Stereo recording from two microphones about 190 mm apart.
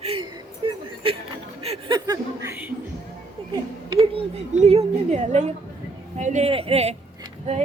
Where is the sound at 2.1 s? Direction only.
15° right (ahead or behind).